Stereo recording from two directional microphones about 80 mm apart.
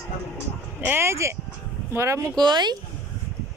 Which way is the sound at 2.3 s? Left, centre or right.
Right.